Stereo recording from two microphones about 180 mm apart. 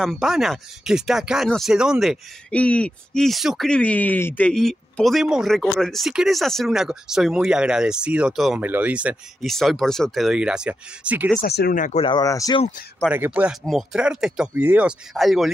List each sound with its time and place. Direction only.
0.0 s speech: centre (ahead or behind)
11.4 s speech: 60° left (ahead or behind); by 12.0 s 45° left (ahead or behind)
12.0 s speech: 25° left (ahead or behind)
13.1 s speech: 10° right (ahead or behind)